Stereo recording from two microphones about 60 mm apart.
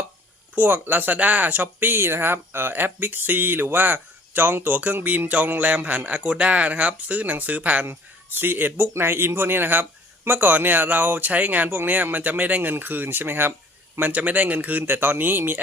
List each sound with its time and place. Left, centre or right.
0.5 s a man's voice: right
7.9 s a man's voice: right
14.0 s a man's voice: right